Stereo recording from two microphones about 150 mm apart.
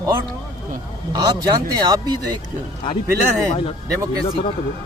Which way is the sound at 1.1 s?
25° right (ahead or behind).